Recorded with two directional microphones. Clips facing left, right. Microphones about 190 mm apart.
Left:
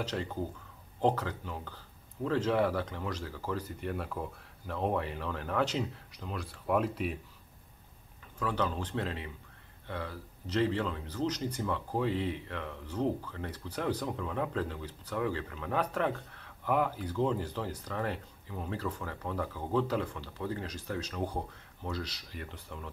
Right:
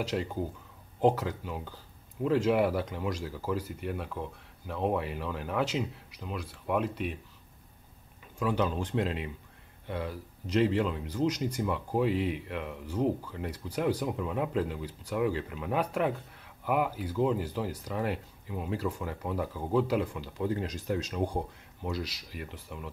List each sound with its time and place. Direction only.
0.0 s speech: 10° right (ahead or behind)
8.4 s speech: 15° right (ahead or behind)